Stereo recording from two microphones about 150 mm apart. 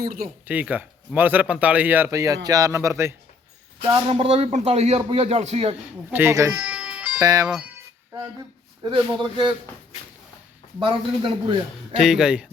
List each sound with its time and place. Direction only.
0.0 s speech: 75° right (ahead or behind)
0.4 s speech: 10° right (ahead or behind)
4.1 s a man's voice: 45° right (ahead or behind)
6.1 s speech: 15° right (ahead or behind)
7.2 s speech: 25° right (ahead or behind)
7.4 s speech: 5° right (ahead or behind)
8.8 s a man's voice: 30° right (ahead or behind)
10.8 s a man's voice: 35° right (ahead or behind)
11.9 s speech: 5° right (ahead or behind)